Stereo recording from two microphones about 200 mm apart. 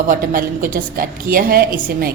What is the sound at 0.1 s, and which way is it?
A woman's voice, 45° right (ahead or behind).